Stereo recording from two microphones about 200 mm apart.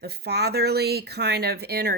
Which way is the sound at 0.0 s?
55° right (ahead or behind).